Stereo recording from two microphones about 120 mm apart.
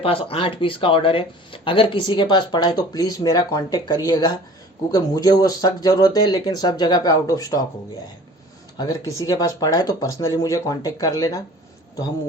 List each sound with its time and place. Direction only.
0.0 s speech: 50° left (ahead or behind); by 7.6 s 30° left (ahead or behind)
9.1 s speech: 30° left (ahead or behind)